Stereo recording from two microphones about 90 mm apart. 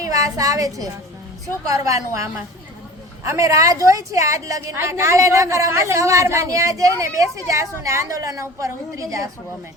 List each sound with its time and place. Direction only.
0.0 s a child's voice: 40° right (ahead or behind)